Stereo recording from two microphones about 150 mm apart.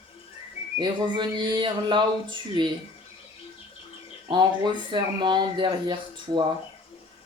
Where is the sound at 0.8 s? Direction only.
30° right (ahead or behind).